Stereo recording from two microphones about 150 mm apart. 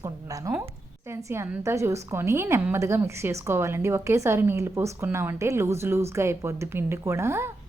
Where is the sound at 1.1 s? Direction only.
15° right (ahead or behind).